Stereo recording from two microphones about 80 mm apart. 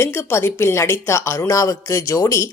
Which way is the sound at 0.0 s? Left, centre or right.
Left.